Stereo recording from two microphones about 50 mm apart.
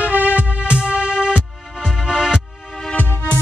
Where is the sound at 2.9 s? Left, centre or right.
Left.